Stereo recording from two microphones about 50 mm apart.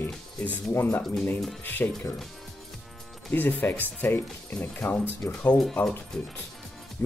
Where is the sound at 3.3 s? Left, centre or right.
Left.